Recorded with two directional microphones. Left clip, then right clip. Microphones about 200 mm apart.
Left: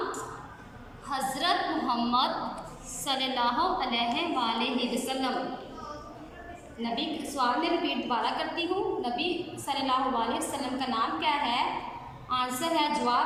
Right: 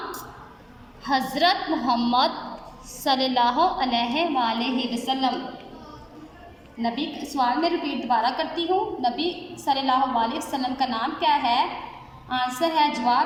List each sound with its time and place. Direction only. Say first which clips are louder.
1.0 s a woman's voice: right 7 dB; 35° right (ahead or behind)
6.8 s a woman's voice: right 4 dB; 35° right (ahead or behind)